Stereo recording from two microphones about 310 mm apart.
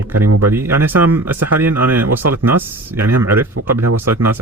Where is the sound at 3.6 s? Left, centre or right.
Right.